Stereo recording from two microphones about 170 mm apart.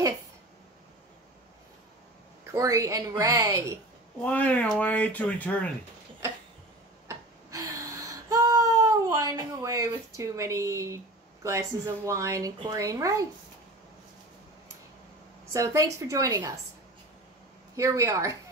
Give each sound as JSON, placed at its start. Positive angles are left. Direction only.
{"t": 2.5, "sound": "speech", "side_deg": -20}
{"t": 4.2, "sound": "speech", "side_deg": 10}
{"t": 7.1, "sound": "a sound", "side_deg": -20}
{"t": 11.4, "sound": "a woman's voice", "side_deg": -15}
{"t": 15.5, "sound": "speech", "side_deg": -20}
{"t": 17.7, "sound": "a woman's voice", "side_deg": -15}